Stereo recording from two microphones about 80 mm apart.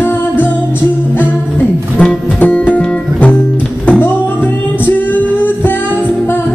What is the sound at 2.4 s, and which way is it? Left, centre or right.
Music, left.